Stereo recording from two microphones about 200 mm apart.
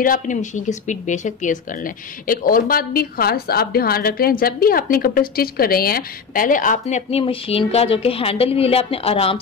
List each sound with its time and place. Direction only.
0.0 s speech: 40° left (ahead or behind)